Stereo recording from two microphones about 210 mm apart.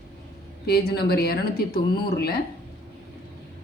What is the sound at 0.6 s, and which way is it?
Speech, 50° left (ahead or behind).